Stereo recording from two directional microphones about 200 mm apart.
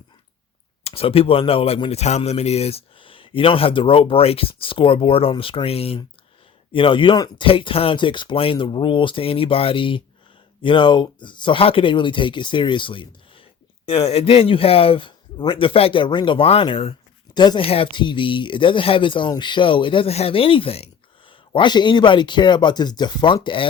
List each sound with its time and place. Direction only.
0.9 s speech: 30° left (ahead or behind)